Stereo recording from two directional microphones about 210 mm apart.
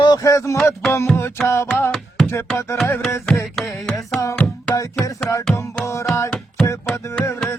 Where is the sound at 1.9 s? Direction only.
Centre (ahead or behind).